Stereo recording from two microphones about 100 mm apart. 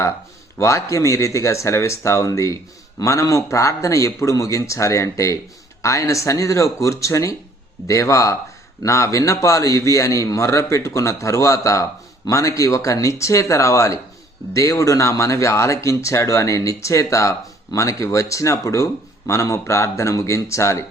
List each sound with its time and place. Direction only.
0.6 s a man's voice: 30° left (ahead or behind)